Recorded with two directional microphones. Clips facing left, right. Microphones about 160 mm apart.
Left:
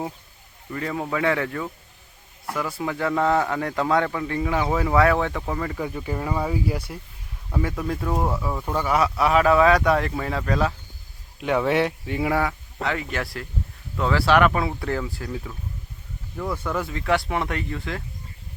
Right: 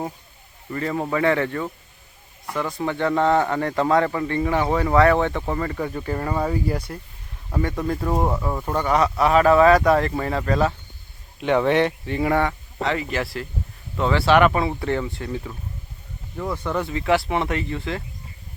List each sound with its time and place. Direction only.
0.7 s a man's voice: centre (ahead or behind)
8.1 s speech: 20° right (ahead or behind)
8.7 s a man's voice: 5° left (ahead or behind)
16.4 s speech: 10° right (ahead or behind)
16.7 s a man's voice: centre (ahead or behind)